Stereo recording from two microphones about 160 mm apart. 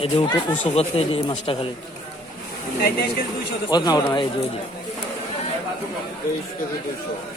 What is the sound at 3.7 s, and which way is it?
Speech, 25° left (ahead or behind).